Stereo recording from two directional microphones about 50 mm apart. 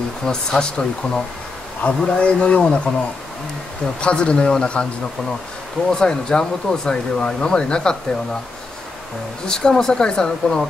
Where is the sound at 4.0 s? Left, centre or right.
Left.